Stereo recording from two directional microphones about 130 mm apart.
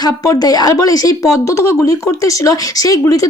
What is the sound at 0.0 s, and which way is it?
Speech, 30° left (ahead or behind).